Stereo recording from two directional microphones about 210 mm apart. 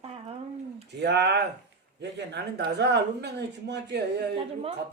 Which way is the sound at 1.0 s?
55° right (ahead or behind).